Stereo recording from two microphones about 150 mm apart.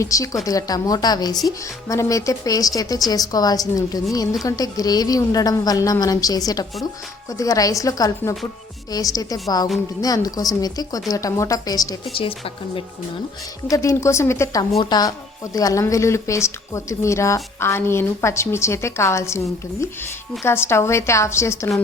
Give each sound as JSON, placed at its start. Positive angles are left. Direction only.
{"t": 0.0, "sound": "speech", "side_deg": 20}
{"t": 12.1, "sound": "speech", "side_deg": 35}
{"t": 13.7, "sound": "speech", "side_deg": 20}
{"t": 20.4, "sound": "a woman's voice", "side_deg": 15}